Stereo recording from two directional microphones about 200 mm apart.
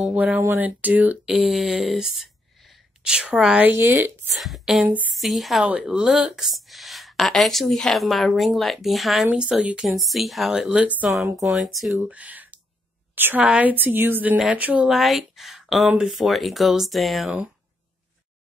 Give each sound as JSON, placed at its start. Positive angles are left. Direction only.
{"t": 0.0, "sound": "a woman's voice", "side_deg": -5}
{"t": 4.3, "sound": "a woman's voice", "side_deg": 0}